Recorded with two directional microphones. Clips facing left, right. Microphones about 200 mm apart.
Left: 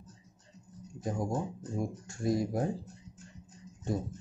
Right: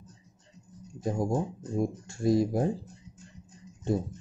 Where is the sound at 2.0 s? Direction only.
25° right (ahead or behind).